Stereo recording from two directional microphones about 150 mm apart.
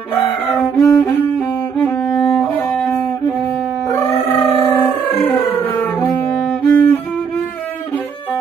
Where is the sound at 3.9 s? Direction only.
20° left (ahead or behind).